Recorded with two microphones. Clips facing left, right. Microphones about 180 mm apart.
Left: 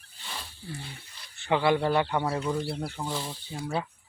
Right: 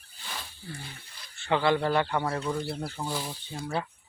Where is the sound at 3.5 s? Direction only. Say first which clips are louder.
Left 1 dB; 10° left (ahead or behind).